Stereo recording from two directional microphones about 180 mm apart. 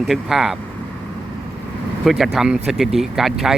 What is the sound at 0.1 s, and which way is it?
Speech, centre (ahead or behind).